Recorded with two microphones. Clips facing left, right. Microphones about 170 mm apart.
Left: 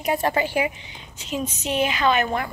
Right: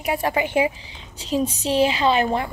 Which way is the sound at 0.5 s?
30° right (ahead or behind).